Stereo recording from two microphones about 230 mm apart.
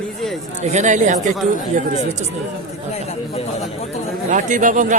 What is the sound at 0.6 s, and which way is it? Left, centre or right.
Speech, right.